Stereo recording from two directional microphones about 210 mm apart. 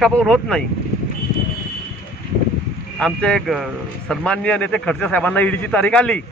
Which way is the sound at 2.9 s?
5° left (ahead or behind).